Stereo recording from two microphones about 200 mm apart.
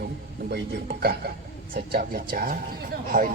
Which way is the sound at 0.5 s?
50° right (ahead or behind).